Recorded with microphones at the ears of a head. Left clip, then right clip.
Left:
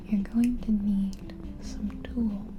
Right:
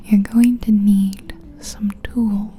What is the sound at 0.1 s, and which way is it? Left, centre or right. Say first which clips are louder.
Speech: right 12 dB; right.